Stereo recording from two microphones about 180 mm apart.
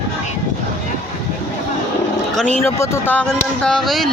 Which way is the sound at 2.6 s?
15° left (ahead or behind).